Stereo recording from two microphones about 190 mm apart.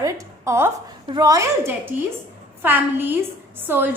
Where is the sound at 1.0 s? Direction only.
20° right (ahead or behind).